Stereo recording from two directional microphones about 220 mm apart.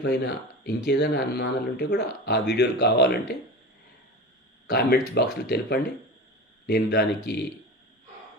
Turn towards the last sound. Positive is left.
turn(degrees=50)  # may be behind; listen again after turning